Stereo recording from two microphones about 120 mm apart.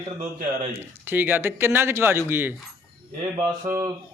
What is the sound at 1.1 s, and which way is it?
Speech, 15° right (ahead or behind).